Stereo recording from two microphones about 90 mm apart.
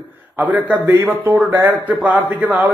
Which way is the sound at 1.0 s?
20° right (ahead or behind).